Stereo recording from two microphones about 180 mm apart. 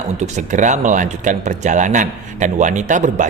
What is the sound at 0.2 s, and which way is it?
Speech, 40° right (ahead or behind).